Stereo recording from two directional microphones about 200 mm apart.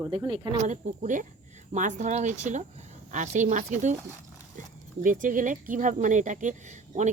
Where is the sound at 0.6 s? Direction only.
40° right (ahead or behind).